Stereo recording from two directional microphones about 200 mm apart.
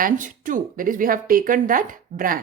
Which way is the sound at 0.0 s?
40° right (ahead or behind).